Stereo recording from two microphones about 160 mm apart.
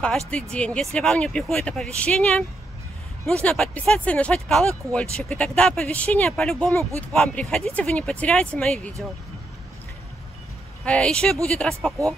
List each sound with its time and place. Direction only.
0.0 s speech: 5° left (ahead or behind)
6.7 s speech: 20° right (ahead or behind)
7.0 s speech: 5° left (ahead or behind)
10.9 s speech: 5° left (ahead or behind)